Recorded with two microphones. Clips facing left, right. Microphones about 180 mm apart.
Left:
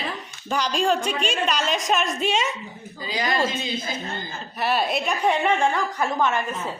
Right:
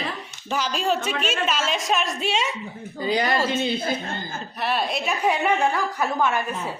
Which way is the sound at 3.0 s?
55° right (ahead or behind).